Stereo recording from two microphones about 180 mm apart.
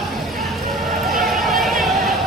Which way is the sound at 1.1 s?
Centre (ahead or behind).